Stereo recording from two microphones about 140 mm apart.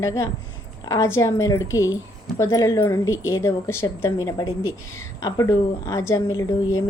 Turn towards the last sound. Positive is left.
turn(degrees=25)  # may be behind; listen again after turning